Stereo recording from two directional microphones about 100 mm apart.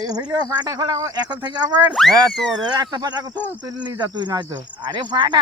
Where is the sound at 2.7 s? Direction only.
45° right (ahead or behind).